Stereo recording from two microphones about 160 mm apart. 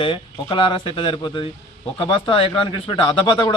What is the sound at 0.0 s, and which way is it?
Speech, 30° left (ahead or behind).